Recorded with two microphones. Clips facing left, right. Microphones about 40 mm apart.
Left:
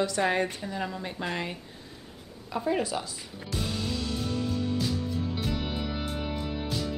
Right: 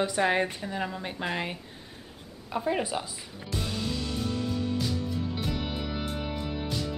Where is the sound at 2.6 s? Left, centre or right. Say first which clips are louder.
Left 1 dB; centre.